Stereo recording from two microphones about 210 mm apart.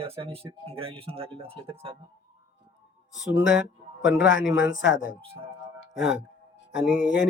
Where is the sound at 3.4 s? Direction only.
5° right (ahead or behind).